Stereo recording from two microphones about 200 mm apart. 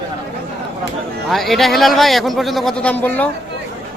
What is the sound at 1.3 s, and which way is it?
Speech, centre (ahead or behind).